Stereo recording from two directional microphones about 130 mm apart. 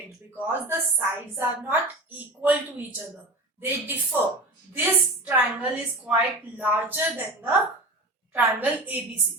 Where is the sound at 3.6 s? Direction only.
20° right (ahead or behind).